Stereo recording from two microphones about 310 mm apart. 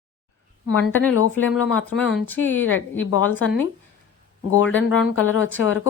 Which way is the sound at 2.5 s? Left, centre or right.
Left.